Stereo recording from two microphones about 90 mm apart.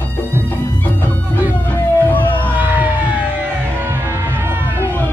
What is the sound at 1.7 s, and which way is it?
Music, 20° left (ahead or behind).